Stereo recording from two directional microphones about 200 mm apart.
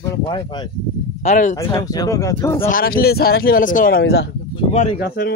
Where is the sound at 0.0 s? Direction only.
20° left (ahead or behind).